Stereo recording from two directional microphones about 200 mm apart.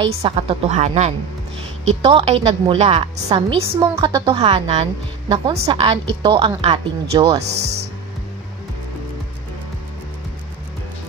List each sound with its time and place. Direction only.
0.0 s a woman's voice: 30° right (ahead or behind)